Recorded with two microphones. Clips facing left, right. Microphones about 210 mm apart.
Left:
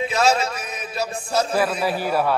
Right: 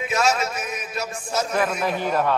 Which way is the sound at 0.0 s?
30° left (ahead or behind).